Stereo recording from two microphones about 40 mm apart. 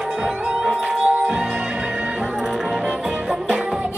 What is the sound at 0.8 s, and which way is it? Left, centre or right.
Music, centre.